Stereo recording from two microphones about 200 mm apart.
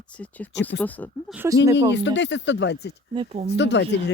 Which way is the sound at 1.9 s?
60° left (ahead or behind).